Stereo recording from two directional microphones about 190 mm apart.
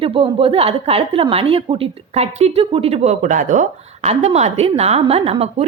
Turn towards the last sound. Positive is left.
turn(degrees=-35)  # may be behind; listen again after turning